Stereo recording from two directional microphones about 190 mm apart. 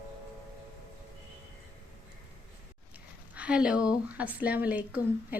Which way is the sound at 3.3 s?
5° right (ahead or behind).